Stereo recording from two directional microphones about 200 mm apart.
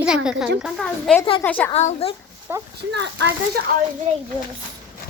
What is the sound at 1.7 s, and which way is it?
Speech, 30° left (ahead or behind).